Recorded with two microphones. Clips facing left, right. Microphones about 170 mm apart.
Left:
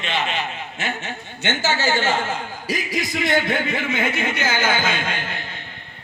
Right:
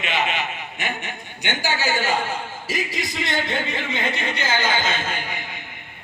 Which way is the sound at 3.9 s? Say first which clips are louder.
Left 3 dB; 20° right (ahead or behind).